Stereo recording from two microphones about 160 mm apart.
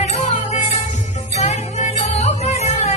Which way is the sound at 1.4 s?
45° left (ahead or behind).